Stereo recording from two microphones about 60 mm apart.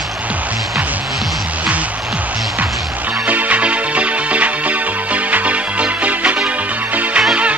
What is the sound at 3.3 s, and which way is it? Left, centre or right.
Music, right.